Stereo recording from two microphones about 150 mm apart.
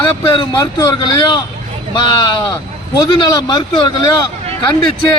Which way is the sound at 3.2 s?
30° left (ahead or behind).